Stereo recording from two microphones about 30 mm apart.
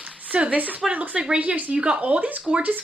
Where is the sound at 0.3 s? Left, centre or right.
Right.